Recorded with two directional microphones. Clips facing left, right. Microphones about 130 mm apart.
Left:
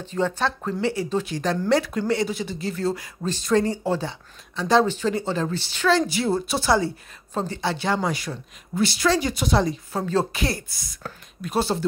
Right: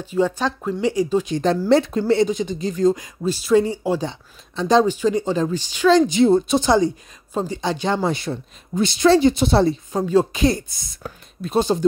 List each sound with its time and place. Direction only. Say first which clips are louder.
0.0 s speech: right 4 dB; 10° right (ahead or behind); by 9.8 s 30° right (ahead or behind)
9.9 s speech: right 5 dB; 15° right (ahead or behind)